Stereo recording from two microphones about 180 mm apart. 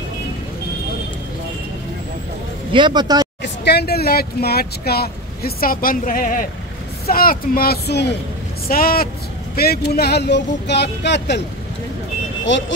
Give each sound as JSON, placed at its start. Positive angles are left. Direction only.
{"t": 2.7, "sound": "speech", "side_deg": -25}
{"t": 3.4, "sound": "speech", "side_deg": 65}
{"t": 8.6, "sound": "speech", "side_deg": 55}
{"t": 12.5, "sound": "speech", "side_deg": 90}